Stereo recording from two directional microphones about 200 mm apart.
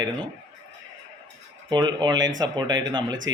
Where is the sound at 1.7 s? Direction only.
20° right (ahead or behind).